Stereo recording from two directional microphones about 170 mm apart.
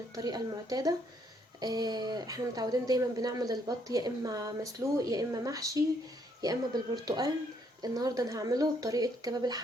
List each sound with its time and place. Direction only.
0.1 s speech: 25° right (ahead or behind)